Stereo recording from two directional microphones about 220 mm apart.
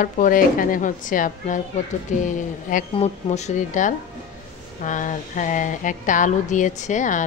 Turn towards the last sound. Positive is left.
turn(degrees=35)  # may be behind; listen again after turning